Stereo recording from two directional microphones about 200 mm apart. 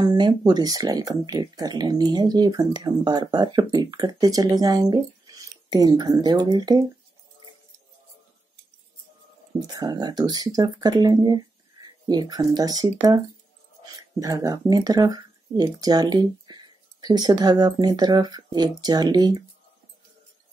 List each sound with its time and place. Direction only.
0.0 s speech: 20° right (ahead or behind)
9.7 s speech: 20° right (ahead or behind)
14.2 s speech: 15° right (ahead or behind)